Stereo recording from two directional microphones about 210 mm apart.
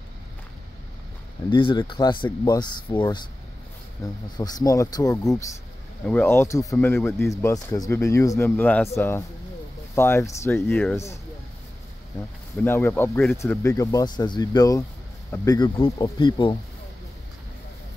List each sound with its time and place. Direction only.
1.5 s speech: 20° left (ahead or behind)
12.6 s speech: 10° left (ahead or behind)